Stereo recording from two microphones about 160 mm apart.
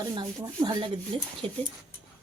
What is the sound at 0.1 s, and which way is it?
Speech, 25° right (ahead or behind).